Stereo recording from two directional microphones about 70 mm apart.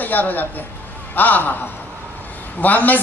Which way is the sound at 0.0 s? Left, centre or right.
Left.